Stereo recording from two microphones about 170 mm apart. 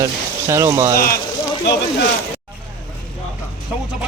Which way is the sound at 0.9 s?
60° left (ahead or behind).